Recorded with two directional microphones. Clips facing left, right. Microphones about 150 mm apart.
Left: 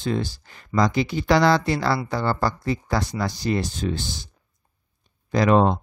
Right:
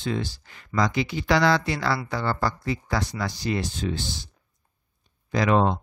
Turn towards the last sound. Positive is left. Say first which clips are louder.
# left 3 dB
turn(degrees=40)  # may be behind; listen again after turning